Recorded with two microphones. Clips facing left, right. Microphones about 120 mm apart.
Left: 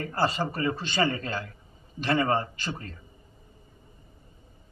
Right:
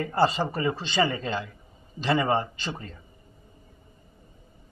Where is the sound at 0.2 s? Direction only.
25° right (ahead or behind).